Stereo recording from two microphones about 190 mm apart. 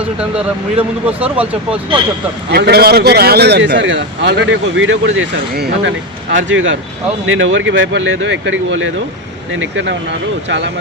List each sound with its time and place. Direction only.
0.0 s speech: 5° right (ahead or behind)
2.5 s a man's voice: 55° right (ahead or behind)
6.3 s speech: 85° right